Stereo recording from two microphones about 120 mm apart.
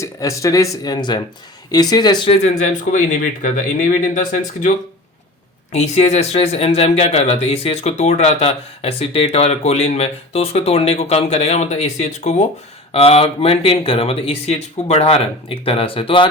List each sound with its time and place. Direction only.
0.0 s speech: 25° left (ahead or behind)
2.4 s speech: 80° left
3.4 s speech: 90° left
5.7 s speech: 65° left (ahead or behind)
12.9 s speech: 55° left (ahead or behind)